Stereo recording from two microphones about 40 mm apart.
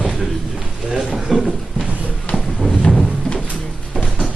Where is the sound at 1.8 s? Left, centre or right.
Right.